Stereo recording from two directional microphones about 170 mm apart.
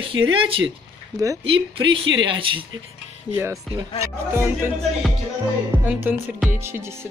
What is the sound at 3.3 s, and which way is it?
Speech, 10° right (ahead or behind).